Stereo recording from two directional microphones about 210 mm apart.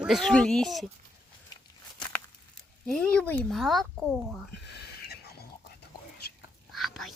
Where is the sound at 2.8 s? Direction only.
5° left (ahead or behind).